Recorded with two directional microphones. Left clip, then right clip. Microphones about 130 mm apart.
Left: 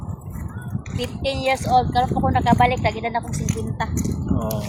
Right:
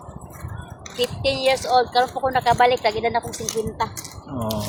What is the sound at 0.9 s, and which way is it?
Speech, 40° right (ahead or behind).